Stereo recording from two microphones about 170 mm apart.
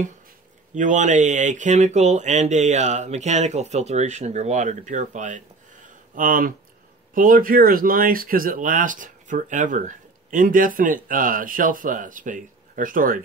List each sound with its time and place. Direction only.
0.7 s speech: 45° right (ahead or behind)